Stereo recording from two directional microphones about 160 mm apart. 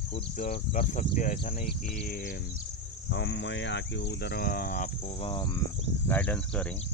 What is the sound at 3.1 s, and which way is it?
Speech, 90° left.